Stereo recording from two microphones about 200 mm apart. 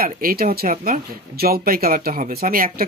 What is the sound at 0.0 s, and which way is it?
Speech, 45° right (ahead or behind).